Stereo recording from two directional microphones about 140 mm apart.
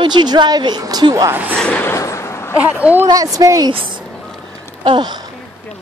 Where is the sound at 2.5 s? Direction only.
10° right (ahead or behind).